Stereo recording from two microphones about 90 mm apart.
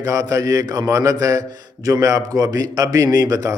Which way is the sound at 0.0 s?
40° right (ahead or behind).